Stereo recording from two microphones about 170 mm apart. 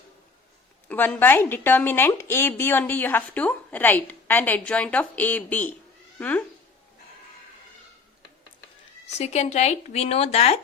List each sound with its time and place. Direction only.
0.9 s a woman's voice: 10° left (ahead or behind)
9.1 s speech: 40° left (ahead or behind)